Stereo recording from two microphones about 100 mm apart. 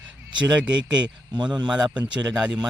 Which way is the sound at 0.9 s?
45° right (ahead or behind).